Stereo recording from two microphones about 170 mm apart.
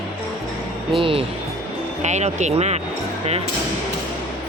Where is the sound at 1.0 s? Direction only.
30° right (ahead or behind).